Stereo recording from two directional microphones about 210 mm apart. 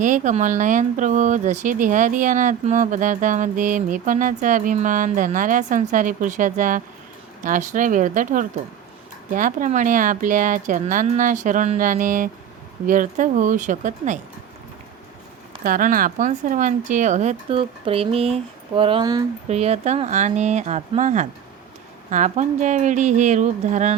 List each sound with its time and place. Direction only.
0.0 s speech: 35° right (ahead or behind)
15.6 s speech: 40° right (ahead or behind)